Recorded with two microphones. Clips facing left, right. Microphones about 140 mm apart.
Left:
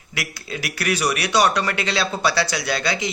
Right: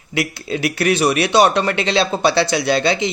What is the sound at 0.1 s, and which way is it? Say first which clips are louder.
Speech: right 9 dB; 25° right (ahead or behind).